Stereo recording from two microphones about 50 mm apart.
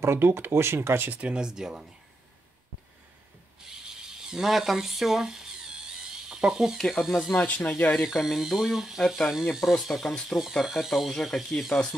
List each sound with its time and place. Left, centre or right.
0.0 s speech: right
1.3 s speech: centre
3.6 s a sound: centre
6.9 s speech: centre
7.4 s speech: left
8.0 s speech: centre